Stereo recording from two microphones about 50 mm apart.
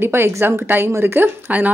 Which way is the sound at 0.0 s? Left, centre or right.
Right.